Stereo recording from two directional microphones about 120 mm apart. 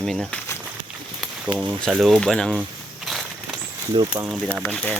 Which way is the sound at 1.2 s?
5° right (ahead or behind).